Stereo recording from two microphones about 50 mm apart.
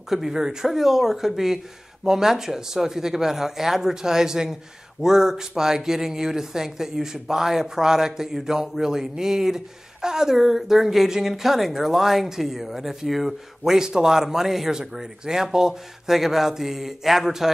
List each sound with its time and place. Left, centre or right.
0.1 s a woman's voice: centre